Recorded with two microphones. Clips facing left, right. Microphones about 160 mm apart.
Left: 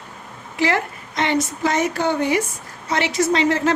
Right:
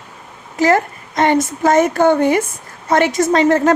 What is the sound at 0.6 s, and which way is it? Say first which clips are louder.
Speech: right 6 dB; 45° right (ahead or behind).